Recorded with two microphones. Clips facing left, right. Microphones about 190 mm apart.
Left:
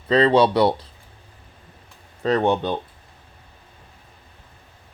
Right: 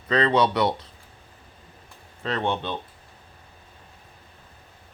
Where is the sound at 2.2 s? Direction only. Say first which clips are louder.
Left 7 dB; 40° left (ahead or behind).